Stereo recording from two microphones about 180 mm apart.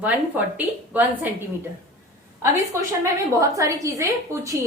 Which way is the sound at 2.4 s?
15° right (ahead or behind).